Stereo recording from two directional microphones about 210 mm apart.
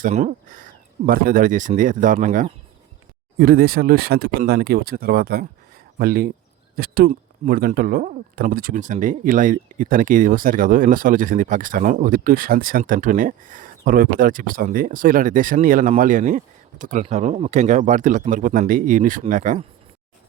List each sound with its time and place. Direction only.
0.0 s speech: 35° right (ahead or behind)
3.3 s speech: 45° right (ahead or behind)